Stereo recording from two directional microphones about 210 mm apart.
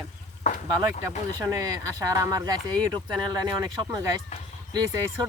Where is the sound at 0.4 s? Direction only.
35° left (ahead or behind).